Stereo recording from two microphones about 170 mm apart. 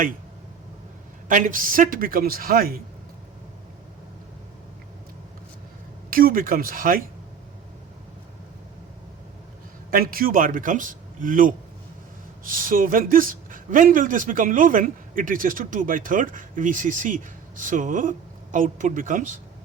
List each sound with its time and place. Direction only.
1.3 s a man's voice: 50° right (ahead or behind)
6.1 s a man's voice: 55° right (ahead or behind)
9.9 s a man's voice: 60° right (ahead or behind)